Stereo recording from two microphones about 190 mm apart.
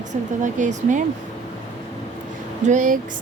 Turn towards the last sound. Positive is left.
turn(degrees=-45)  # may be behind; listen again after turning